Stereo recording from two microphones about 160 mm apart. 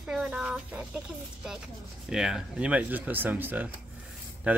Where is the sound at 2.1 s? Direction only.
5° right (ahead or behind).